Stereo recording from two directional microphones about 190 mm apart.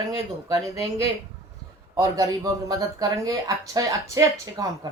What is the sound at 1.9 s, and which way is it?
A woman's voice, 20° right (ahead or behind).